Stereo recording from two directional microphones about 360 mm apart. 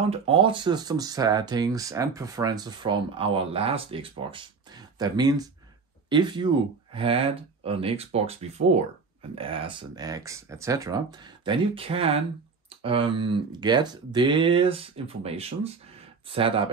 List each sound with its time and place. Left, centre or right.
0.1 s speech: centre